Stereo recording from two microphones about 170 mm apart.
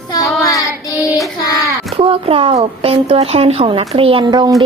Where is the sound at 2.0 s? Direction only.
30° right (ahead or behind).